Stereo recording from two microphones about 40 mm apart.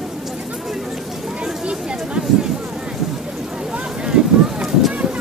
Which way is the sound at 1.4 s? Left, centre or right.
Right.